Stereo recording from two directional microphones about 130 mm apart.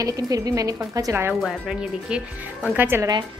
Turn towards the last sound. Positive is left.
turn(degrees=-15)  # may be behind; listen again after turning